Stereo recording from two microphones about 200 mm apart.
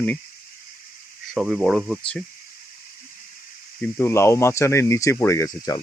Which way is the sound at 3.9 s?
15° left (ahead or behind).